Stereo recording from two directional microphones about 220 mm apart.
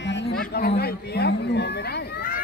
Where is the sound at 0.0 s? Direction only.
55° left (ahead or behind).